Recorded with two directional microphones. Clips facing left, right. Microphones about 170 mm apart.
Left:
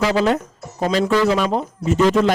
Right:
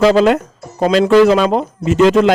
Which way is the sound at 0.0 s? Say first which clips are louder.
Right 7 dB; 75° right (ahead or behind).